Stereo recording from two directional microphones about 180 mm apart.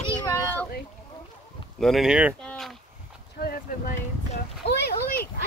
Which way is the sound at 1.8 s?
Centre (ahead or behind).